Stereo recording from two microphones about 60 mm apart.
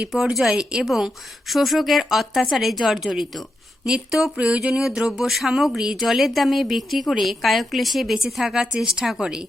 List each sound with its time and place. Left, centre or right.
0.0 s speech: centre
4.4 s a sound: centre
4.9 s speech: centre